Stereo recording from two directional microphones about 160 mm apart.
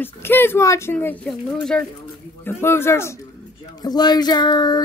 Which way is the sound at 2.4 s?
15° left (ahead or behind).